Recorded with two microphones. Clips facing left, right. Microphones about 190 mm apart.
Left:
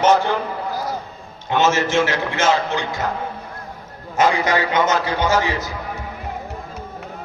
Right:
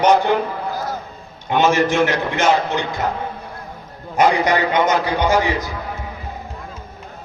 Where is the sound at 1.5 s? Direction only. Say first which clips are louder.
Right 2 dB; 15° right (ahead or behind).